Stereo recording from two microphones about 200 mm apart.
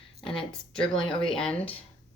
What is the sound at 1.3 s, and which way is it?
Speech, 5° left (ahead or behind).